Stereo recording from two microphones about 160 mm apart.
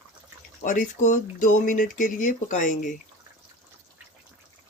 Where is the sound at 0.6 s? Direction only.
50° left (ahead or behind).